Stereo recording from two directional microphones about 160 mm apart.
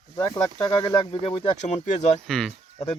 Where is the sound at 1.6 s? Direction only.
45° left (ahead or behind).